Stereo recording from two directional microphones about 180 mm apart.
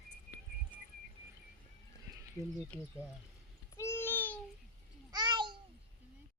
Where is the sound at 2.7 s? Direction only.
10° left (ahead or behind).